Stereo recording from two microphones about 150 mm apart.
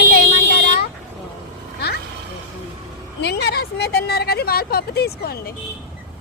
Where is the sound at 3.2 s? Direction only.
90° left.